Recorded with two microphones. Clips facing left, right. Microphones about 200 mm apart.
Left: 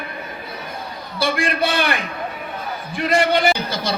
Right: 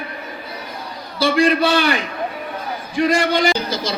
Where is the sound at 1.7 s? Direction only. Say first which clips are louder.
Right 3 dB; 55° left (ahead or behind).